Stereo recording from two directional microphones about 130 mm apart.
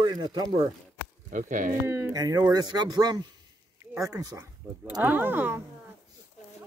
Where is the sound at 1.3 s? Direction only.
85° right.